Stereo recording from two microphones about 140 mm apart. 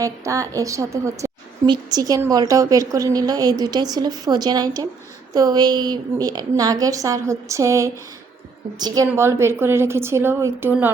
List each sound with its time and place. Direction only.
0.0 s a woman's voice: 25° right (ahead or behind)